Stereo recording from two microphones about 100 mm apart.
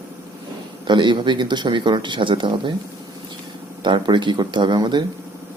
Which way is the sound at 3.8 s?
50° right (ahead or behind).